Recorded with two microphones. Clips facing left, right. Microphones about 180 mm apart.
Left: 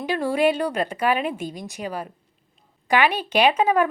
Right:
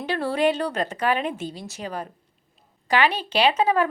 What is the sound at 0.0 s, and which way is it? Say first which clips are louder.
A woman's voice: left 2 dB; 10° left (ahead or behind).